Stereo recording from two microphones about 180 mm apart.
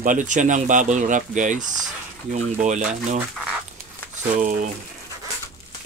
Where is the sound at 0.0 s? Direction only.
45° right (ahead or behind).